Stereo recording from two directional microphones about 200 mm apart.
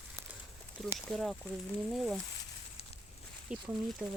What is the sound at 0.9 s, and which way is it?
Speech, centre (ahead or behind).